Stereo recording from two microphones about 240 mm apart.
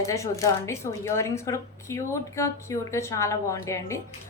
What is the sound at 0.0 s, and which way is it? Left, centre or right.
A woman's voice, centre.